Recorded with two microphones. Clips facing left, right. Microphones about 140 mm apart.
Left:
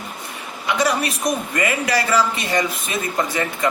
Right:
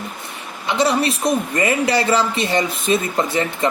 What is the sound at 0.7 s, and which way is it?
A man's voice, 25° right (ahead or behind).